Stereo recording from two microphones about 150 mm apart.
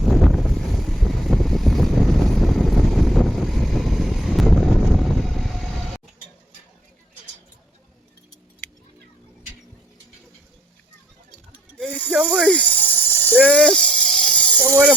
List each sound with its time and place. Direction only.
0.0 s boat: centre (ahead or behind)
12.1 s a sound: 5° right (ahead or behind)
12.5 s snake: 10° left (ahead or behind)